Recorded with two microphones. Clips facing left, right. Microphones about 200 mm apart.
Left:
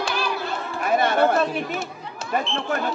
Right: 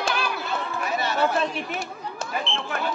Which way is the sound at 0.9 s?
55° left (ahead or behind).